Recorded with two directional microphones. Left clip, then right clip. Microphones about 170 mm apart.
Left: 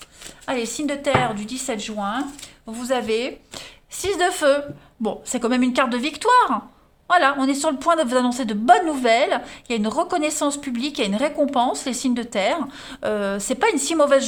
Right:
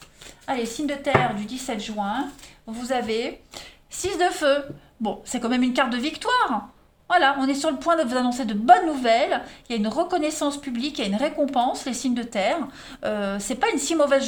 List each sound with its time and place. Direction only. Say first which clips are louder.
0.4 s a woman's voice: left 2 dB; 45° left (ahead or behind)